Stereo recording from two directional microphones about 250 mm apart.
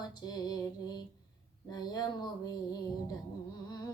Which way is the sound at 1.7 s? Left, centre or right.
Centre.